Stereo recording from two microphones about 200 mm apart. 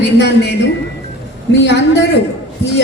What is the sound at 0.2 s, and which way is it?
A woman's voice, 60° left (ahead or behind).